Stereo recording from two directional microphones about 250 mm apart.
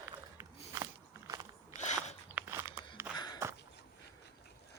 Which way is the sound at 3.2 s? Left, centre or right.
Centre.